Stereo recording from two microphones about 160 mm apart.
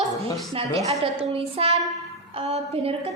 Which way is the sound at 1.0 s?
35° right (ahead or behind).